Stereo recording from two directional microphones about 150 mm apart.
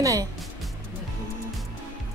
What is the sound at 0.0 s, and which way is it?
Music, 20° right (ahead or behind).